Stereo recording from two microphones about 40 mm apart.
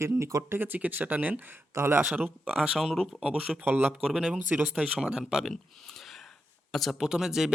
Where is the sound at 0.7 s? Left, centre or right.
Right.